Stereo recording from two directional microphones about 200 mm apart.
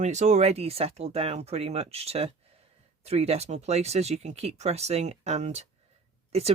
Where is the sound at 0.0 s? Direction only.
35° right (ahead or behind).